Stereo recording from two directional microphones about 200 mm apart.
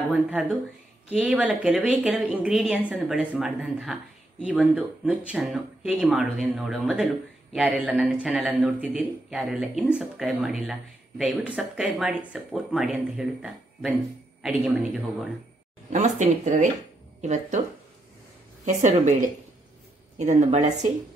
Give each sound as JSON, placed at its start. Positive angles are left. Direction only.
{"t": 0.1, "sound": "speech", "side_deg": 0}
{"t": 15.9, "sound": "a woman's voice", "side_deg": -35}
{"t": 18.7, "sound": "a woman's voice", "side_deg": -35}